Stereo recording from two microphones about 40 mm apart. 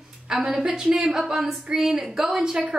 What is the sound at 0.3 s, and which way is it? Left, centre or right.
A woman's voice, centre.